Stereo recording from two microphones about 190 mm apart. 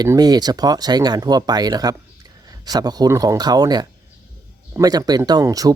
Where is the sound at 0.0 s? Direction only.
20° right (ahead or behind).